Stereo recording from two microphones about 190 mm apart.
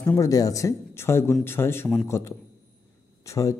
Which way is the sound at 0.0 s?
15° left (ahead or behind).